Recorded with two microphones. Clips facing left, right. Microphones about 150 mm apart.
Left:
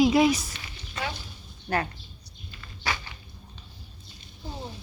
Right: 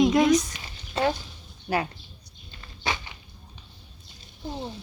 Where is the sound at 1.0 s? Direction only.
30° right (ahead or behind).